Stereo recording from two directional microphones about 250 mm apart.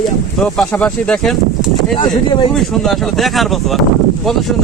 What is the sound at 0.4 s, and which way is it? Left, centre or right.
A man's voice, centre.